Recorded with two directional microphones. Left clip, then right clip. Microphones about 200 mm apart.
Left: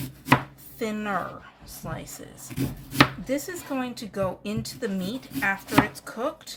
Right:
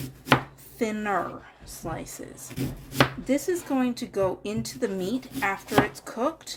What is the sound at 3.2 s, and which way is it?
A woman's voice, 25° right (ahead or behind).